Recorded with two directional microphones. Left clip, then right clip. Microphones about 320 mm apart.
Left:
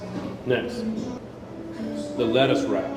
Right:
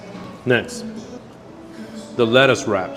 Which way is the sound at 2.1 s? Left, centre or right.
Right.